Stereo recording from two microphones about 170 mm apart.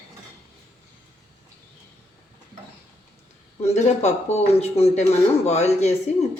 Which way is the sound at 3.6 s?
40° left (ahead or behind).